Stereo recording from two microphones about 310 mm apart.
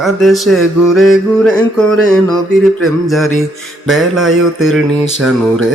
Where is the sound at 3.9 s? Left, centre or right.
Centre.